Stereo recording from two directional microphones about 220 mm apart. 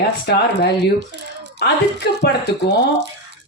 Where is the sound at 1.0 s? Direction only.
50° right (ahead or behind).